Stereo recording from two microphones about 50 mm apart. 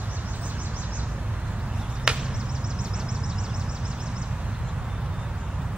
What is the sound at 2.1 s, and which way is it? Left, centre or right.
Chop, centre.